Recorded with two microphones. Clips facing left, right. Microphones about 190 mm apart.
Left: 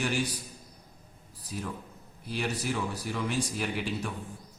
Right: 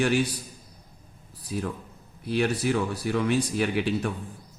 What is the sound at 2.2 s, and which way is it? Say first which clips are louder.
A man's voice: right 7 dB; 65° right (ahead or behind).